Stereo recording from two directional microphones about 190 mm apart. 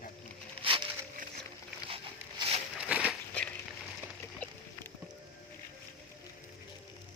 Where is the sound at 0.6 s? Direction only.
25° right (ahead or behind).